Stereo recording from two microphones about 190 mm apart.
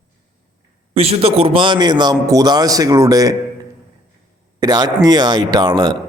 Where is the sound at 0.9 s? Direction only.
30° right (ahead or behind).